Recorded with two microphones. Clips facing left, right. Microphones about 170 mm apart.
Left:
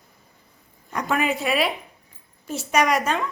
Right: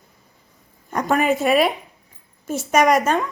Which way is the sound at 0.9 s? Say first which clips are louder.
Right 5 dB; 40° right (ahead or behind).